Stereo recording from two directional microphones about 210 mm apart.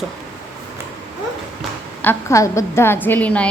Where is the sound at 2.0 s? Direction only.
10° left (ahead or behind).